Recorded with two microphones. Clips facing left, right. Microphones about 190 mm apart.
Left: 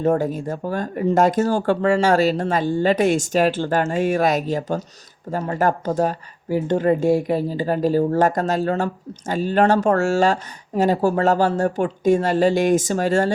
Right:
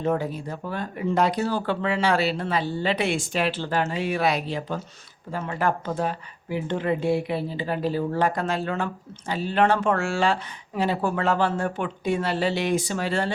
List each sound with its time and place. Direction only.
0.0 s speech: 45° left (ahead or behind)